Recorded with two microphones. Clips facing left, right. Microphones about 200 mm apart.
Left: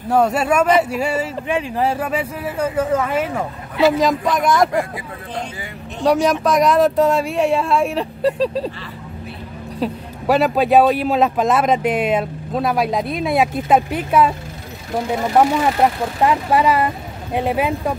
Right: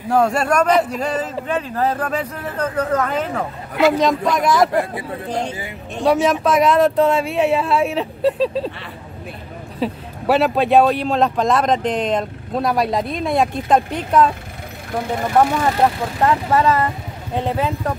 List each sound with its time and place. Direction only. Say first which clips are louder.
0.1 s a man's voice: left 1 dB; 5° left (ahead or behind)
4.9 s speech: right 4 dB; 25° right (ahead or behind)
6.0 s a man's voice: even; centre (ahead or behind)
9.8 s a man's voice: even; centre (ahead or behind)
16.2 s speech: even; 15° left (ahead or behind)